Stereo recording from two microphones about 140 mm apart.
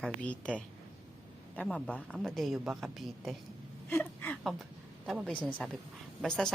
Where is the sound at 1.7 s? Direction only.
10° left (ahead or behind).